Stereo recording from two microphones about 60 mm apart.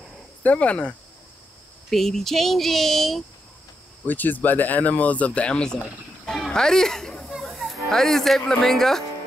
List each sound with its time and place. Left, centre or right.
0.4 s speech: left
1.9 s speech: centre
4.1 s speech: left; by 5.8 s centre
6.5 s chatter: centre
7.3 s speech: centre